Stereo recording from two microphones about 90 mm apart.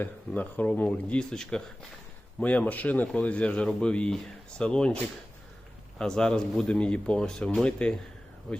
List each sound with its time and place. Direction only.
0.0 s speech: 20° left (ahead or behind)
6.0 s speech: 10° left (ahead or behind)